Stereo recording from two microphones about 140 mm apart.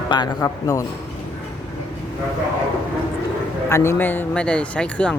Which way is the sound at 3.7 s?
20° left (ahead or behind).